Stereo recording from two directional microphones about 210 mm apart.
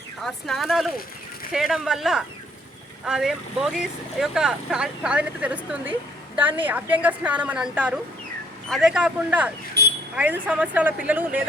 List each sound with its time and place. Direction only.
0.2 s a woman's voice: centre (ahead or behind)
9.8 s speech: 50° right (ahead or behind)
10.2 s a woman's voice: 5° right (ahead or behind)